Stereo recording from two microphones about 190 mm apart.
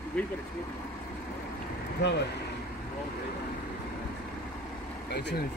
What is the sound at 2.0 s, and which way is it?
Speech, 60° left (ahead or behind).